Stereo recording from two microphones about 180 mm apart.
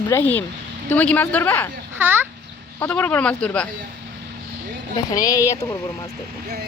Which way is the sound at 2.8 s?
10° left (ahead or behind).